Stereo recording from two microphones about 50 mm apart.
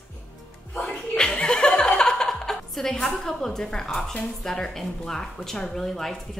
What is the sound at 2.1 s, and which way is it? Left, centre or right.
Music, centre.